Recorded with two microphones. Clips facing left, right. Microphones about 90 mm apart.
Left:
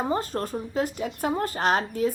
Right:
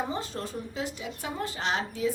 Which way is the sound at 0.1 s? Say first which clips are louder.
Left 7 dB; 45° left (ahead or behind).